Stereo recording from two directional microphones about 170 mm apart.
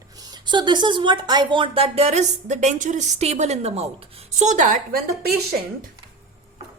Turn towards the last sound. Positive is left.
turn(degrees=-65)  # may be behind; listen again after turning